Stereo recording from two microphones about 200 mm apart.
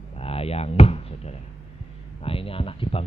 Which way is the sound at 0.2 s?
30° left (ahead or behind).